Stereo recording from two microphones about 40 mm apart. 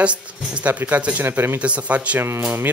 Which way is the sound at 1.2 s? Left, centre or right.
Right.